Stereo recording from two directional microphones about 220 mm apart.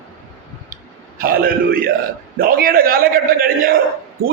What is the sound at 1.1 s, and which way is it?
A man's voice, 45° right (ahead or behind).